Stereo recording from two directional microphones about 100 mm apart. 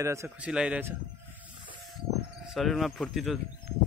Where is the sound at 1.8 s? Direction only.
5° right (ahead or behind).